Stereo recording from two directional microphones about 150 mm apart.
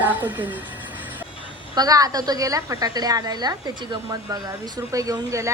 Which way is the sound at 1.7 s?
25° right (ahead or behind).